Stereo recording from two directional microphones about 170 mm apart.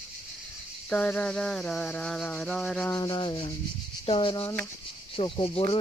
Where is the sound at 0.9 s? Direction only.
10° left (ahead or behind).